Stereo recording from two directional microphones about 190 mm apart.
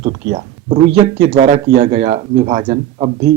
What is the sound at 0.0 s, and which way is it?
Speech, 30° right (ahead or behind).